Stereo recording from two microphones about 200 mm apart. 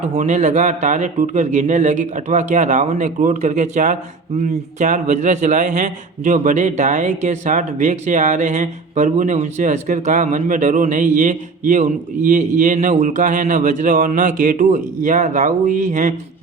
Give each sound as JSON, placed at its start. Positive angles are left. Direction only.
{"t": 0.0, "sound": "a man's voice", "side_deg": -35}